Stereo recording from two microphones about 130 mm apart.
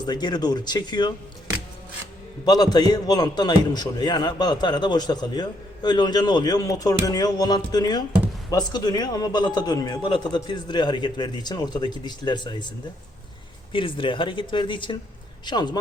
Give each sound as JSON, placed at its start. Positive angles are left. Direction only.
{"t": 0.0, "sound": "a man's voice", "side_deg": 35}
{"t": 2.4, "sound": "a man's voice", "side_deg": 30}
{"t": 13.7, "sound": "a man's voice", "side_deg": 40}